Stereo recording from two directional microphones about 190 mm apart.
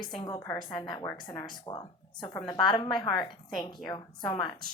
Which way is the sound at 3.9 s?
25° left (ahead or behind).